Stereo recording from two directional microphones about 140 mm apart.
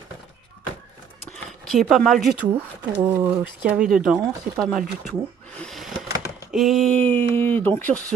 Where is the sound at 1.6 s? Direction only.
Centre (ahead or behind).